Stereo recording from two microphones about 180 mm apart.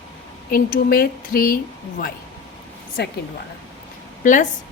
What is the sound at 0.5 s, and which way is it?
A woman's voice, 55° left (ahead or behind).